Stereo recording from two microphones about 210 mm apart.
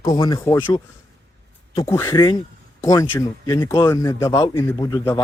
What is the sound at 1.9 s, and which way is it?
Speech, 10° left (ahead or behind).